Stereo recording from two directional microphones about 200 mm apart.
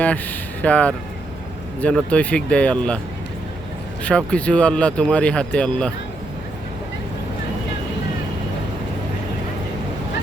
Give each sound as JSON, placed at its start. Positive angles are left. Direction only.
{"t": 0.6, "sound": "speech", "side_deg": 5}
{"t": 4.3, "sound": "speech", "side_deg": 5}